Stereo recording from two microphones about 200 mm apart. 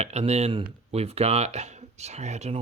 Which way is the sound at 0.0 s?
35° right (ahead or behind).